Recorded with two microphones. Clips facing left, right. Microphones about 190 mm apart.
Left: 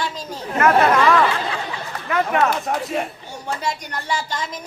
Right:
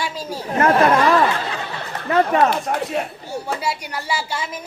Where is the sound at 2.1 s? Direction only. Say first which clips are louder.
Right 3 dB; 30° right (ahead or behind).